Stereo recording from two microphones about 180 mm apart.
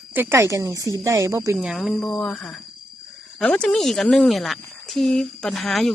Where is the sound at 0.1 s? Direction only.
10° right (ahead or behind).